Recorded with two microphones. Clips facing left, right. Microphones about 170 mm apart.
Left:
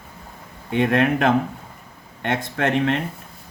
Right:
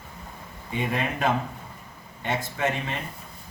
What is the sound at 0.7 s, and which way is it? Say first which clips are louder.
Speech: left 9 dB; 70° left (ahead or behind).